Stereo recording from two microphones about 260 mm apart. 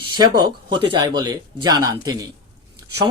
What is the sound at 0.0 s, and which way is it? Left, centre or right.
Speech, centre.